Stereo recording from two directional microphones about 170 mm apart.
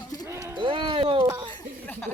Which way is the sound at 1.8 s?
10° left (ahead or behind).